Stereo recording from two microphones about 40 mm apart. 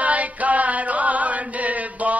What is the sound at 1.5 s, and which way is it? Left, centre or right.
Chant, right.